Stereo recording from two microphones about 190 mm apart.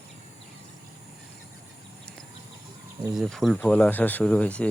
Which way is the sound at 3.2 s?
Centre (ahead or behind).